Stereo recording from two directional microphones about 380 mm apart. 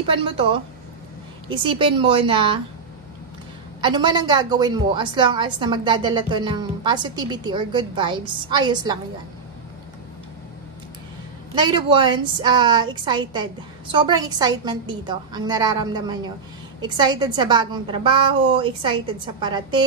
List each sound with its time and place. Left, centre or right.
0.0 s a woman's voice: centre
1.6 s a woman's voice: centre
3.8 s a woman's voice: centre
11.5 s a woman's voice: centre